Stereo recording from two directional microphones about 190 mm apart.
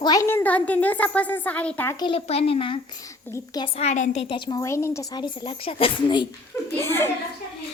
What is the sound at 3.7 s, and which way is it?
A woman's voice, 40° left (ahead or behind).